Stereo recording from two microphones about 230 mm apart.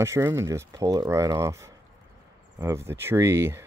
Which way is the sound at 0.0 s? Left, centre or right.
Centre.